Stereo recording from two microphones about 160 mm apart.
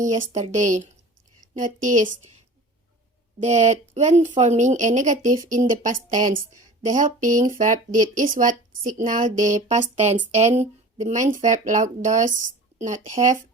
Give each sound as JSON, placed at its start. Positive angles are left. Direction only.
{"t": 0.0, "sound": "speech", "side_deg": -50}
{"t": 3.3, "sound": "speech", "side_deg": -50}